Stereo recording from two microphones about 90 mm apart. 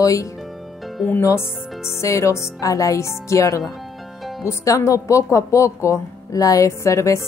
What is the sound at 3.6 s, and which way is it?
Music, centre (ahead or behind).